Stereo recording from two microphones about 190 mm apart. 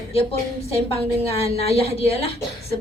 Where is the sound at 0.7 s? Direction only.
30° left (ahead or behind).